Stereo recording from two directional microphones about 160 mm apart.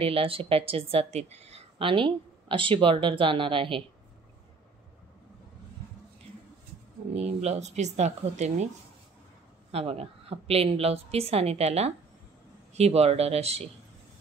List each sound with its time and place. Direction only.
0.0 s a woman's voice: 35° right (ahead or behind)
7.2 s speech: 45° right (ahead or behind)
9.7 s a woman's voice: 40° right (ahead or behind)